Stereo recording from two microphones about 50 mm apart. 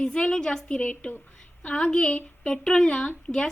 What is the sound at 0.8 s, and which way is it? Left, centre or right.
A woman's voice, left.